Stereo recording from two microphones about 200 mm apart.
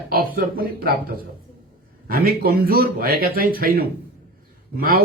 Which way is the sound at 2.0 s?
45° right (ahead or behind).